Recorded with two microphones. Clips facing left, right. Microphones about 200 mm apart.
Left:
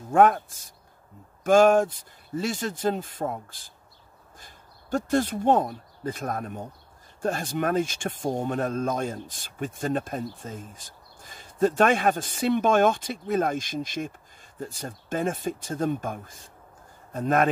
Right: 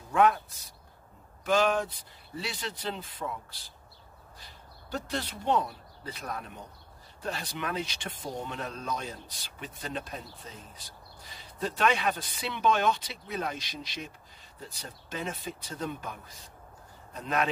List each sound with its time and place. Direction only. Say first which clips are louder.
0.1 s speech: left 5 dB; 50° left (ahead or behind)